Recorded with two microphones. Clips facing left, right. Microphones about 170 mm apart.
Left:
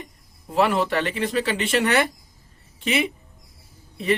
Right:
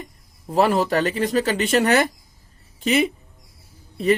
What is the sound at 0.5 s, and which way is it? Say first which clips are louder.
A man's voice: right 2 dB; 40° right (ahead or behind).